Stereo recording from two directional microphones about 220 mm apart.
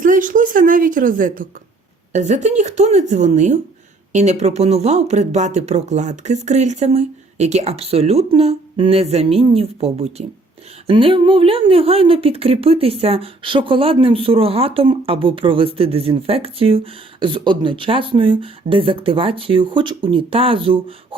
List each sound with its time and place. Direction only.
0.0 s a woman's voice: 35° right (ahead or behind)